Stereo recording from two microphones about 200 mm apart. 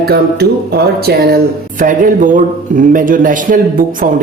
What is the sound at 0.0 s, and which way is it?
A man's voice, 50° right (ahead or behind).